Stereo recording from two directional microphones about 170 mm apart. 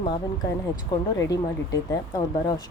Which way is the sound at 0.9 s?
20° left (ahead or behind).